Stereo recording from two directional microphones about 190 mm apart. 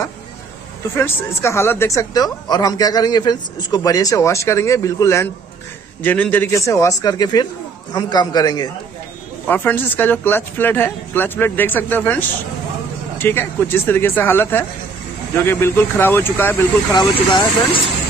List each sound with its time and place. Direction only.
0.9 s speech: 15° left (ahead or behind)
9.5 s speech: 10° left (ahead or behind)
13.2 s speech: 10° left (ahead or behind)
16.9 s speech: 20° left (ahead or behind)